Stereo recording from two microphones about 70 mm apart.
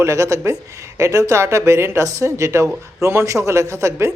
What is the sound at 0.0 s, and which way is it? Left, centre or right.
A man's voice, right.